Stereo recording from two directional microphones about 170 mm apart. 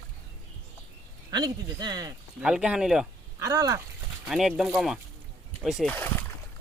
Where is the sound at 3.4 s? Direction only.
20° right (ahead or behind).